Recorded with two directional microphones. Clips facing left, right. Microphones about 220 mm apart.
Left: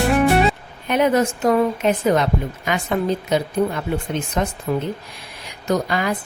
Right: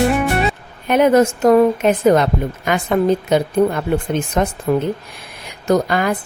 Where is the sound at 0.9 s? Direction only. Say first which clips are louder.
Right 5 dB; 50° right (ahead or behind).